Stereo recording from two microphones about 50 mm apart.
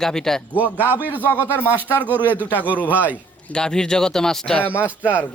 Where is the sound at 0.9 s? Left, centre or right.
Right.